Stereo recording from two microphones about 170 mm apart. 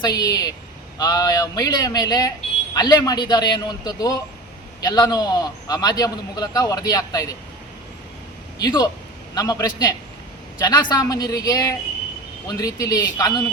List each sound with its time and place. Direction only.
0.0 s a man's voice: 20° left (ahead or behind)
8.5 s a man's voice: 25° left (ahead or behind)